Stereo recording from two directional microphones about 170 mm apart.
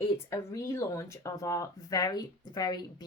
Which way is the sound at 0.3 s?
20° left (ahead or behind).